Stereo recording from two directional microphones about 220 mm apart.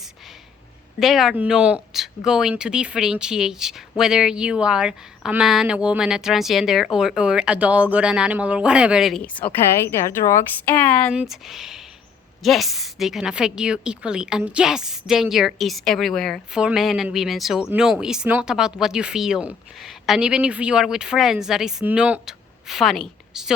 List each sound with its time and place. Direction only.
0.9 s a woman's voice: centre (ahead or behind)
10.2 s a woman's voice: 25° left (ahead or behind)
11.1 s a woman's voice: 5° right (ahead or behind)